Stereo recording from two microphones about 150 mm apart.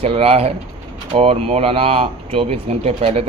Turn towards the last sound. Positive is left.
turn(degrees=-40)  # may be behind; listen again after turning